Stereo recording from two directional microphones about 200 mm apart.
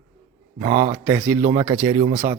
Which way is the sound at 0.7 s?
40° right (ahead or behind).